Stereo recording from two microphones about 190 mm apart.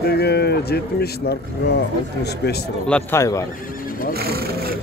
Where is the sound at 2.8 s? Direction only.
10° left (ahead or behind).